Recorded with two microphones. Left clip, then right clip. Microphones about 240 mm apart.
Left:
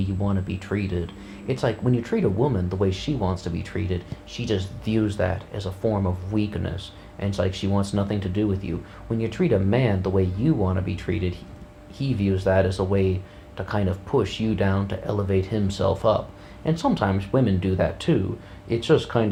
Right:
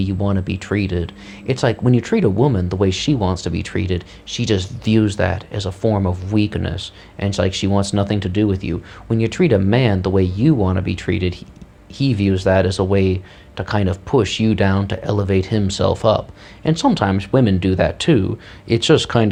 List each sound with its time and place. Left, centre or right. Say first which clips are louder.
0.0 s speech: right 7 dB; right